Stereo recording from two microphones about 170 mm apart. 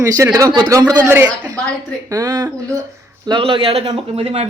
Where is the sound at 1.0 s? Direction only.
10° right (ahead or behind).